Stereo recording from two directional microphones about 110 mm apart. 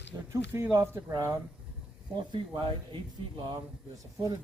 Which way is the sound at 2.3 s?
45° right (ahead or behind).